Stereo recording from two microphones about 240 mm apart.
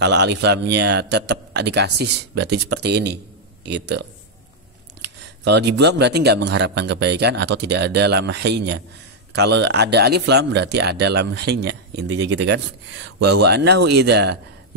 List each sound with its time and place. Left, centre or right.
0.0 s speech: right
5.0 s speech: right